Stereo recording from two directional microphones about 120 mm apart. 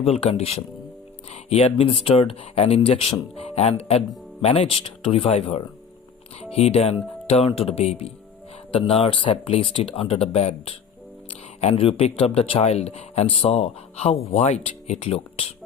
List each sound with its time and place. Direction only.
0.0 s speech: 55° left (ahead or behind)